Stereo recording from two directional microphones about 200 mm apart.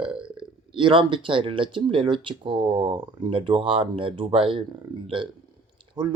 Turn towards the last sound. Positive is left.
turn(degrees=-25)  # may be behind; listen again after turning